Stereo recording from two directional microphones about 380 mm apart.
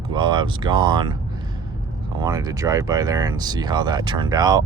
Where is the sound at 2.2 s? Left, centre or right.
Centre.